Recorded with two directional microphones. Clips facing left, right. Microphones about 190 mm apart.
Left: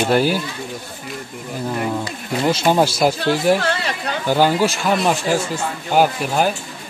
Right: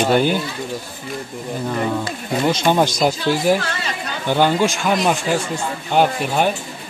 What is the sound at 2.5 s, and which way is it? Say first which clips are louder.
Speech: left 1 dB; 5° left (ahead or behind).